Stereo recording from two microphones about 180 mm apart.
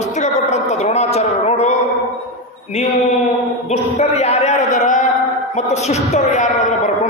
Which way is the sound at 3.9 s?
35° left (ahead or behind).